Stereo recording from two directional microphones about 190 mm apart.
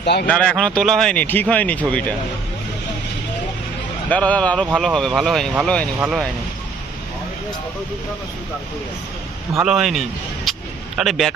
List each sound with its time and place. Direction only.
0.0 s speech: 60° left (ahead or behind)
0.3 s a man's voice: 5° left (ahead or behind)
4.1 s a man's voice: 5° left (ahead or behind)
9.6 s a man's voice: centre (ahead or behind)
10.5 s a sound: centre (ahead or behind)
10.9 s a man's voice: centre (ahead or behind)